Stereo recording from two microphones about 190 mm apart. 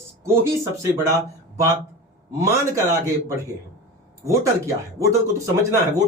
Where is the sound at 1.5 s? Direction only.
15° right (ahead or behind).